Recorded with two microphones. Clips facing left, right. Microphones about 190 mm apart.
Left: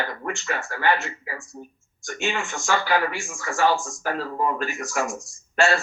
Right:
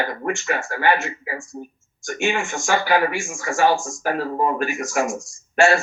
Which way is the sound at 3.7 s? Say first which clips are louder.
Right 3 dB; 45° right (ahead or behind).